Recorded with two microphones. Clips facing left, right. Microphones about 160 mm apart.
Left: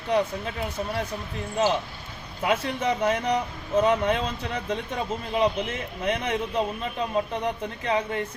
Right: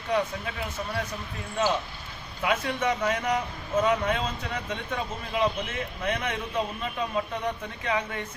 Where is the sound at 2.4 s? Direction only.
30° left (ahead or behind).